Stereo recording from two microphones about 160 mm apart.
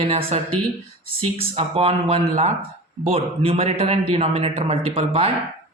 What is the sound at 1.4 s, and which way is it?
Speech, 35° right (ahead or behind).